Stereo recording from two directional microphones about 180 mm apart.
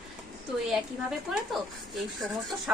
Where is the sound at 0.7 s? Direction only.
Centre (ahead or behind).